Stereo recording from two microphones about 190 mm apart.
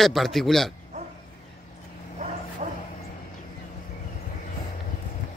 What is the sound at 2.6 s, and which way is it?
Bow-wow, 35° right (ahead or behind).